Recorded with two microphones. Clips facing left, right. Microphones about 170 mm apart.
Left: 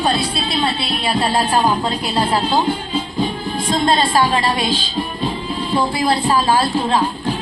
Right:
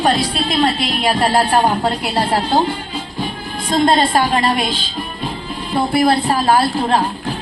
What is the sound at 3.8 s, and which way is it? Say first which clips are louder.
Speech: right 2 dB; 50° right (ahead or behind).